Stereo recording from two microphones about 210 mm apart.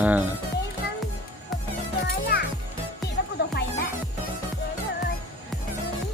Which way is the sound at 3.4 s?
50° left (ahead or behind).